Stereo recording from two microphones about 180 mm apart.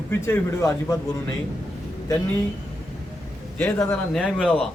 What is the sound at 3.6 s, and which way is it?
Speech, 10° left (ahead or behind).